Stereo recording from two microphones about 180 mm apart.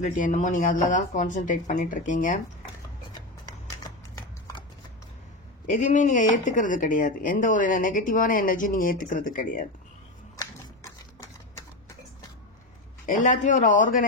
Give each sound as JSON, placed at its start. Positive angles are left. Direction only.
{"t": 0.0, "sound": "speech", "side_deg": 45}
{"t": 3.7, "sound": "horse", "side_deg": 20}
{"t": 5.7, "sound": "speech", "side_deg": 45}
{"t": 10.3, "sound": "a sound", "side_deg": 15}
{"t": 13.0, "sound": "speech", "side_deg": 45}